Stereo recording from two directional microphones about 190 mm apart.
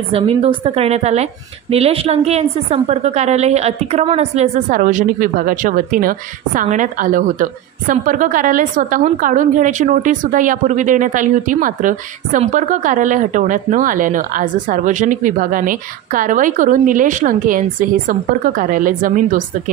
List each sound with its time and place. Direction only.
0.1 s a woman's voice: 30° right (ahead or behind)